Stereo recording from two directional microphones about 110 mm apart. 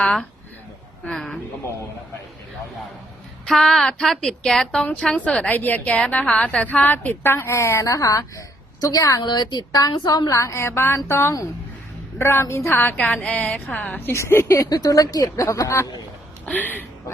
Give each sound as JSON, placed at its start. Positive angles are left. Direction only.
{"t": 0.0, "sound": "a woman's voice", "side_deg": 5}
{"t": 1.0, "sound": "a sound", "side_deg": 5}
{"t": 3.4, "sound": "a woman's voice", "side_deg": 5}
{"t": 16.5, "sound": "a woman's voice", "side_deg": 15}